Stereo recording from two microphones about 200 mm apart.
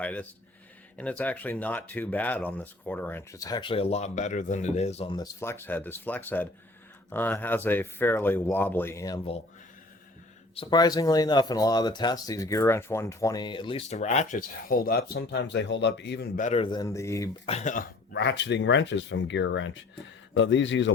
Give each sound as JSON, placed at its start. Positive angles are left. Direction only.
{"t": 0.0, "sound": "speech", "side_deg": 5}
{"t": 10.5, "sound": "speech", "side_deg": 25}
{"t": 16.6, "sound": "speech", "side_deg": 20}
{"t": 17.4, "sound": "speech", "side_deg": 35}
{"t": 18.1, "sound": "a man's voice", "side_deg": 60}